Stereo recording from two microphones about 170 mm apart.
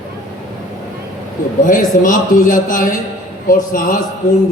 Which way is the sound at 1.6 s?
50° left (ahead or behind).